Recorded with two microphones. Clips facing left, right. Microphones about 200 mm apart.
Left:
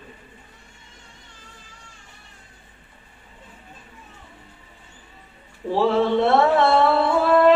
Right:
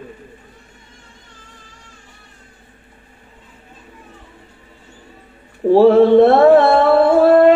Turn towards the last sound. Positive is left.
turn(degrees=-50)  # may be behind; listen again after turning